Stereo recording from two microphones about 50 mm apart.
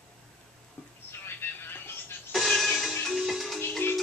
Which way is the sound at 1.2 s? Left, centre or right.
Left.